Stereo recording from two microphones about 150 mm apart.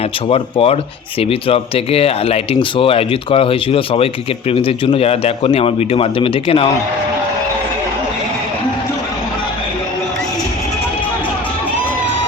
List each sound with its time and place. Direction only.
0.3 s speech: 40° left (ahead or behind)